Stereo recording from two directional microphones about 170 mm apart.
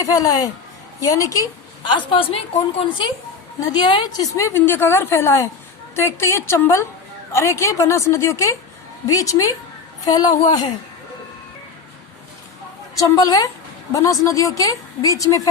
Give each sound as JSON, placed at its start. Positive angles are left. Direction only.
{"t": 0.0, "sound": "a woman's voice", "side_deg": 20}
{"t": 13.0, "sound": "a woman's voice", "side_deg": 20}